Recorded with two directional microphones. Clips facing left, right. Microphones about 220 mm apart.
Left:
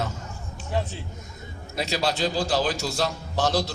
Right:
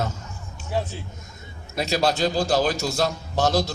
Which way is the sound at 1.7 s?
45° right (ahead or behind).